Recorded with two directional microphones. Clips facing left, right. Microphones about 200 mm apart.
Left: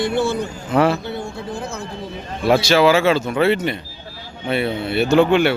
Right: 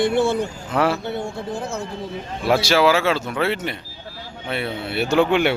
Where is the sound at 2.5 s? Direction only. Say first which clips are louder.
Left 3 dB; 10° right (ahead or behind).